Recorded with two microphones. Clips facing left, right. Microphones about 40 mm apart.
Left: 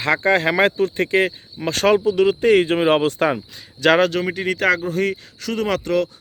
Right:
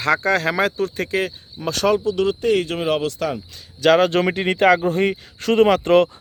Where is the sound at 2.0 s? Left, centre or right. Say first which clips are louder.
Left 3 dB; left.